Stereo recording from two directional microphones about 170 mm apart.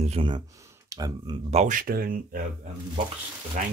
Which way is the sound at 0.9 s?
20° right (ahead or behind).